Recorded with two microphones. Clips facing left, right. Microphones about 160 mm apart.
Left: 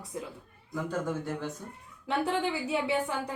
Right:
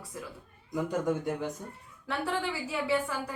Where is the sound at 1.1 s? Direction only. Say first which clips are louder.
Right 3 dB; 15° right (ahead or behind).